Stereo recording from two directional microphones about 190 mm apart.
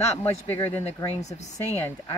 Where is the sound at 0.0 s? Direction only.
10° left (ahead or behind).